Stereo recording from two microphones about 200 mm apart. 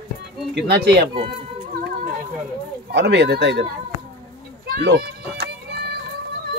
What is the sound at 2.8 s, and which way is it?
Speech, 60° right (ahead or behind).